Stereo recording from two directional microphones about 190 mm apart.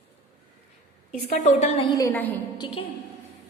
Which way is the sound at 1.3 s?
40° left (ahead or behind).